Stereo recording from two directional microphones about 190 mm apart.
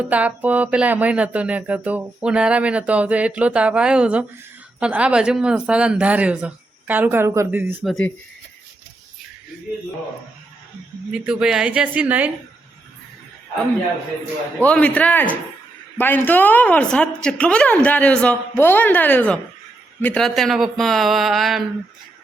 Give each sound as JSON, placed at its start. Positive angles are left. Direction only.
{"t": 0.0, "sound": "speech", "side_deg": -10}
{"t": 11.1, "sound": "speech", "side_deg": -5}
{"t": 14.6, "sound": "speech", "side_deg": 5}